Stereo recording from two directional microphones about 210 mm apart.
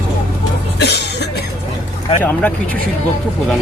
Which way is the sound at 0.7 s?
55° left (ahead or behind).